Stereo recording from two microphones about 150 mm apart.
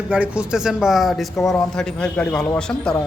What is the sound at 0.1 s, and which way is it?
A man's voice, 5° right (ahead or behind).